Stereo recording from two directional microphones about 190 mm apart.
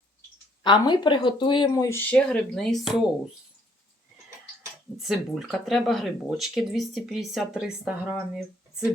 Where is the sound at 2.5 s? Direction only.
Centre (ahead or behind).